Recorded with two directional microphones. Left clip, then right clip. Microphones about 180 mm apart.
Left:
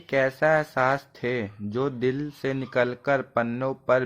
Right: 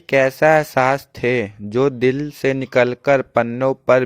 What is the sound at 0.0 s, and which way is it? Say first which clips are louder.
Speech: right 8 dB; 45° right (ahead or behind).